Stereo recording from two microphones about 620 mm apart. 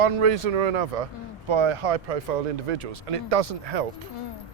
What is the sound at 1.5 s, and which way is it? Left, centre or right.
Speech, right.